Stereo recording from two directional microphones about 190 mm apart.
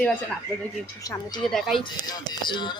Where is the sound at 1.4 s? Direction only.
Centre (ahead or behind).